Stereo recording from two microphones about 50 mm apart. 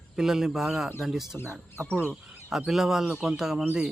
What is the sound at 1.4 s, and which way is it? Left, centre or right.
Speech, left.